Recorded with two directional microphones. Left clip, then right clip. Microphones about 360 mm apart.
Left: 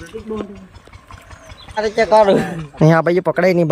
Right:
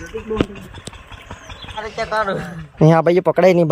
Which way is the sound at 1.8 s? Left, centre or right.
Left.